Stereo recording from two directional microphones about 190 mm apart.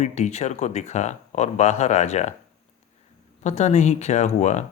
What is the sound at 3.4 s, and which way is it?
Speech, 35° left (ahead or behind).